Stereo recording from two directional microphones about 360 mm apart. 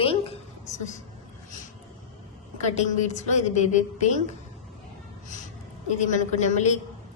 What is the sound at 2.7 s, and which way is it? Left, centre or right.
Speech, centre.